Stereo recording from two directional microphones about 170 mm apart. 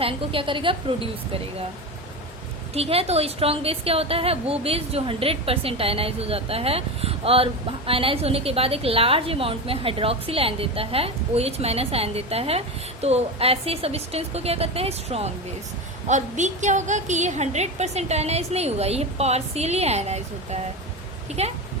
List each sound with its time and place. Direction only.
0.0 s a woman's voice: 30° right (ahead or behind)
2.7 s a woman's voice: 35° right (ahead or behind)